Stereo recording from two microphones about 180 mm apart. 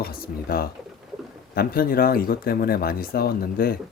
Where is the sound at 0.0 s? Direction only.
55° left (ahead or behind).